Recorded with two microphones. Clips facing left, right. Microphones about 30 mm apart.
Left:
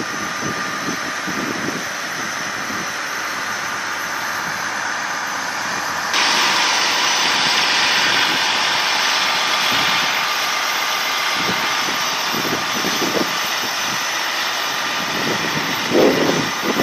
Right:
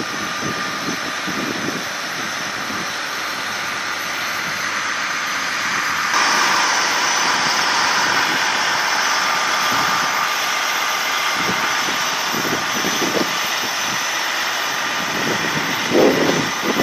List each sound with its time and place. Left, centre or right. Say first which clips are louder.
6.1 s vehicle: left 1 dB; left
8.3 s vehicle: even; left
13.0 s vehicle: even; centre
15.9 s vehicle: even; centre